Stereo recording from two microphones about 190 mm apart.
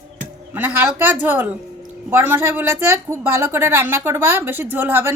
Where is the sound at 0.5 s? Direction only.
10° right (ahead or behind).